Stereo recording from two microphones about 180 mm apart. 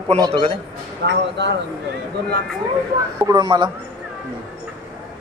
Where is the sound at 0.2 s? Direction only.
30° right (ahead or behind).